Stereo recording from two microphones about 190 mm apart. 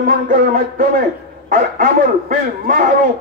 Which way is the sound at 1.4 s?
45° right (ahead or behind).